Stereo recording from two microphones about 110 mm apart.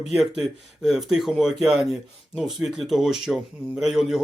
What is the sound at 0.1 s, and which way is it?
Speech, centre (ahead or behind).